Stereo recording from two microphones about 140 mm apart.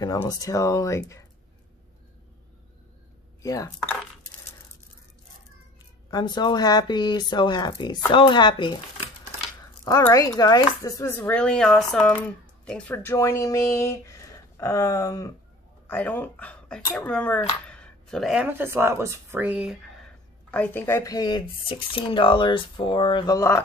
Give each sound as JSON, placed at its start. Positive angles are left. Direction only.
{"t": 0.0, "sound": "speech", "side_deg": 25}
{"t": 3.4, "sound": "speech", "side_deg": 25}
{"t": 6.0, "sound": "speech", "side_deg": 30}
{"t": 9.8, "sound": "speech", "side_deg": 25}
{"t": 11.2, "sound": "speech", "side_deg": 5}
{"t": 15.9, "sound": "speech", "side_deg": 10}
{"t": 18.5, "sound": "speech", "side_deg": -15}
{"t": 20.5, "sound": "speech", "side_deg": 10}